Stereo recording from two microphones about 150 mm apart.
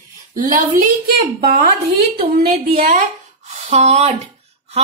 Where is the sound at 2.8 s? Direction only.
55° right (ahead or behind).